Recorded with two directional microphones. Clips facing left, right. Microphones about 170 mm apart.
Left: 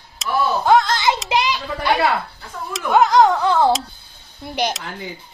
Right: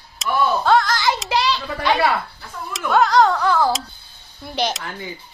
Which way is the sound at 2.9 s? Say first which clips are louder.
Left 2 dB; 20° left (ahead or behind).